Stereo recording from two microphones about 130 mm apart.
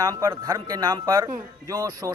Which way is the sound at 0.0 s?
30° right (ahead or behind).